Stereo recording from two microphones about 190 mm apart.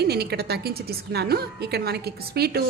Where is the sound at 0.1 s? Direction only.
55° right (ahead or behind).